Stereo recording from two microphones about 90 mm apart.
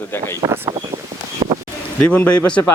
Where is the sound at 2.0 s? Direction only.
15° left (ahead or behind).